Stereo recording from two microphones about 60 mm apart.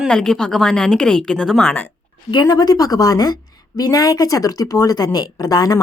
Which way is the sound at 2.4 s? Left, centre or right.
Left.